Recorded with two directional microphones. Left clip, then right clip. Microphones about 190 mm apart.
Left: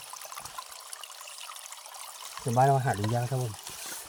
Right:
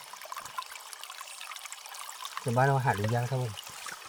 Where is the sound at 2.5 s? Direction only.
20° left (ahead or behind).